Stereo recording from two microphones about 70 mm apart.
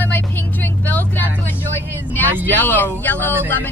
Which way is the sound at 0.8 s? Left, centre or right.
Left.